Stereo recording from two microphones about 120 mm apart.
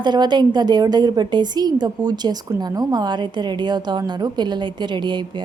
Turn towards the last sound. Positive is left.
turn(degrees=-40)  # may be behind; listen again after turning